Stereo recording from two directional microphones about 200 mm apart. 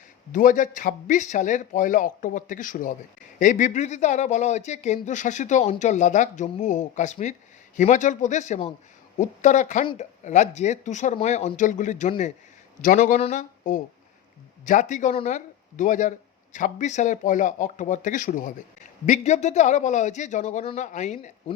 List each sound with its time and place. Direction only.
0.3 s speech: 40° left (ahead or behind)
9.8 s speech: 25° left (ahead or behind)
10.2 s speech: 35° left (ahead or behind)